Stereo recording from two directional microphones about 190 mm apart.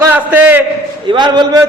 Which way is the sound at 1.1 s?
25° right (ahead or behind).